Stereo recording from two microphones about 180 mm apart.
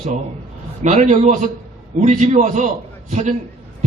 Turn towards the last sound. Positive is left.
turn(degrees=-40)  # may be behind; listen again after turning